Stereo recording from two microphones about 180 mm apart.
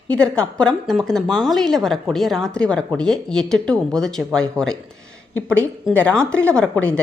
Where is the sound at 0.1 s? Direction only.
5° left (ahead or behind).